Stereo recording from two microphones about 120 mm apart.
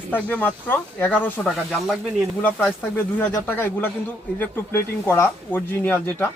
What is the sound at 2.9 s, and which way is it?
Speech, 20° left (ahead or behind).